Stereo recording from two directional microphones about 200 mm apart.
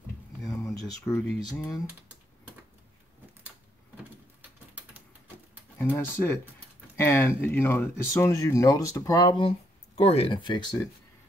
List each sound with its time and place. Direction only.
0.5 s speech: 15° left (ahead or behind)
3.9 s a sound: 10° right (ahead or behind)
5.8 s speech: 10° left (ahead or behind)
9.9 s speech: 30° left (ahead or behind)